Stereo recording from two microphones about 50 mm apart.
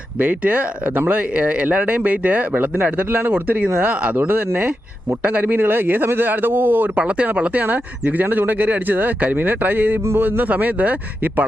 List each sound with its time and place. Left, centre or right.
0.2 s speech: right
5.5 s speech: right
6.9 s speech: right
7.6 s speech: right